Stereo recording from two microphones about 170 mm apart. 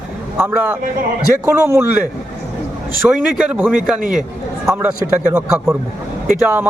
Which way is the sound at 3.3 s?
5° right (ahead or behind).